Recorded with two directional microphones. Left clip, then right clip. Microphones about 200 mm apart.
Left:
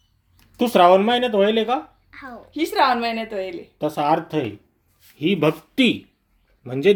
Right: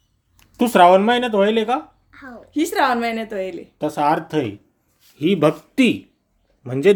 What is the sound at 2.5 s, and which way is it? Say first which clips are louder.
A woman's voice: even; 40° right (ahead or behind).